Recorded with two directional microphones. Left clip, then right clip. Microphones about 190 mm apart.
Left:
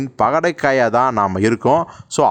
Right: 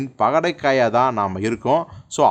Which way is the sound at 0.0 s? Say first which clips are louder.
Left 2 dB; 35° left (ahead or behind).